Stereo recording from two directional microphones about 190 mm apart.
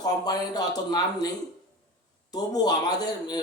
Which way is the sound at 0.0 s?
20° left (ahead or behind).